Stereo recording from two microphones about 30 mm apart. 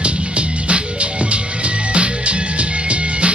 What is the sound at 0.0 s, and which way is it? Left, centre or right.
Music, right.